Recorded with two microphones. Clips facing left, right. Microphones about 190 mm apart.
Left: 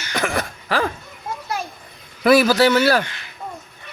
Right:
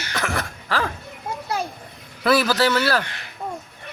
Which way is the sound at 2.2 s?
15° left (ahead or behind).